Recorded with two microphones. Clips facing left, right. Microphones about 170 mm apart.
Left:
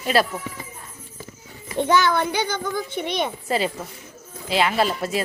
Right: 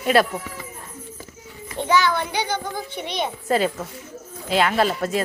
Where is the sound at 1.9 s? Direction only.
50° left (ahead or behind).